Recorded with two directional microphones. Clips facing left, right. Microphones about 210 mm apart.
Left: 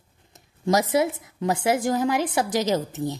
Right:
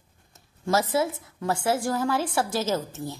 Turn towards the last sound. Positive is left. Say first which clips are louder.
# left 4 dB
turn(degrees=20)  # may be behind; listen again after turning